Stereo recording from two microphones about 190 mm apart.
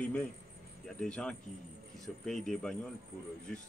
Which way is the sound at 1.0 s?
5° left (ahead or behind).